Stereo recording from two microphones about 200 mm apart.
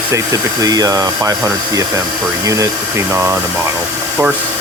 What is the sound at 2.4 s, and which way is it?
Speech, 15° right (ahead or behind).